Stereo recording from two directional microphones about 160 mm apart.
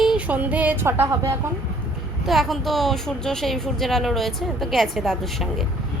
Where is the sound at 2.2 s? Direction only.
Centre (ahead or behind).